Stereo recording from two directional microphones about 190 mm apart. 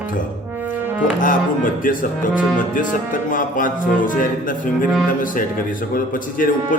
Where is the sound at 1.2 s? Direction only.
45° left (ahead or behind).